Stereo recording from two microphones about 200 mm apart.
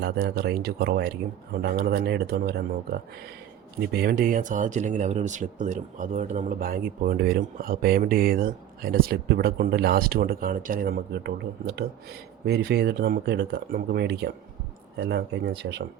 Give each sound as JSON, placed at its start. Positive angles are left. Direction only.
{"t": 0.0, "sound": "speech", "side_deg": -55}
{"t": 3.8, "sound": "speech", "side_deg": -55}